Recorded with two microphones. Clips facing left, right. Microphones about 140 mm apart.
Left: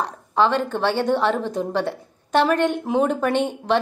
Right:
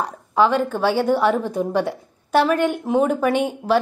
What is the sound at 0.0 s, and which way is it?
A woman's voice, 10° right (ahead or behind).